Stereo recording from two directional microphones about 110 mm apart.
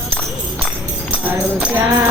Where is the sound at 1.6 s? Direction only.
15° right (ahead or behind).